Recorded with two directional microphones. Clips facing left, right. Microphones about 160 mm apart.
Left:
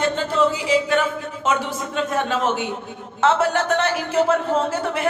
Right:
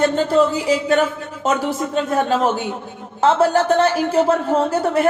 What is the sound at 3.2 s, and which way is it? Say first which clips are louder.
Speech: right 4 dB; 35° right (ahead or behind).